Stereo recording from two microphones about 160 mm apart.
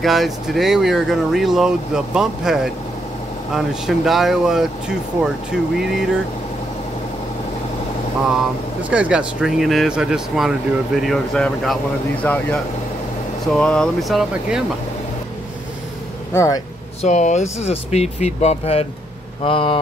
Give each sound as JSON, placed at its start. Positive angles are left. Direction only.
{"t": 0.0, "sound": "speech", "side_deg": 0}
{"t": 8.9, "sound": "speech", "side_deg": -5}
{"t": 16.3, "sound": "speech", "side_deg": 20}
{"t": 17.0, "sound": "speech", "side_deg": 45}